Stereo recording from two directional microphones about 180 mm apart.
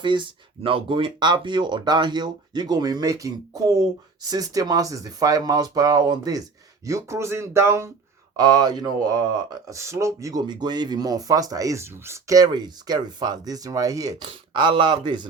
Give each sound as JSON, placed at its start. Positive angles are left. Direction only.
{"t": 0.0, "sound": "speech", "side_deg": -25}